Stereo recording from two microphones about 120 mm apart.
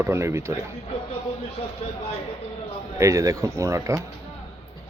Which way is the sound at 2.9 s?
25° right (ahead or behind).